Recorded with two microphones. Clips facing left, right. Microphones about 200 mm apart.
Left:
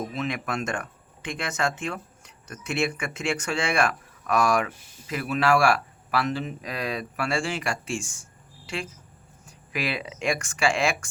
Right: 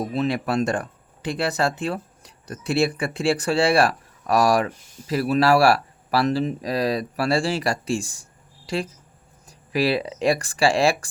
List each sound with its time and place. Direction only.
0.0 s speech: 35° right (ahead or behind)